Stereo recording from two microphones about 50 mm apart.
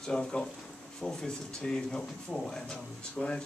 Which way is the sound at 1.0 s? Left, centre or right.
Centre.